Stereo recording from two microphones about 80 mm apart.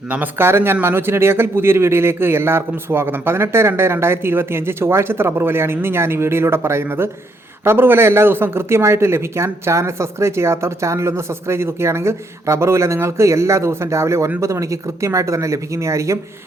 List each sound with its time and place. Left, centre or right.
0.1 s a man's voice: right